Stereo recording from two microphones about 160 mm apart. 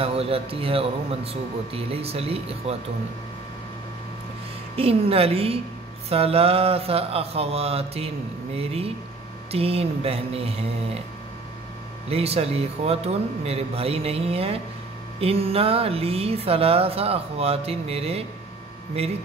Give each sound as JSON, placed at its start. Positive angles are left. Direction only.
{"t": 0.0, "sound": "speech", "side_deg": -35}
{"t": 4.7, "sound": "speech", "side_deg": -35}
{"t": 12.1, "sound": "speech", "side_deg": -40}